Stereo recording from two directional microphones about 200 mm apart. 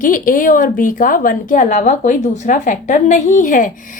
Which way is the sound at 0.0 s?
40° left (ahead or behind).